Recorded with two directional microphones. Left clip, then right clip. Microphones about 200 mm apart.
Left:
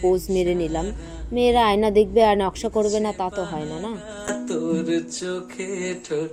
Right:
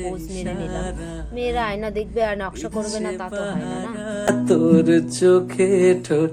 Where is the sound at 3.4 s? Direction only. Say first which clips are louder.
Right 1 dB; 45° right (ahead or behind).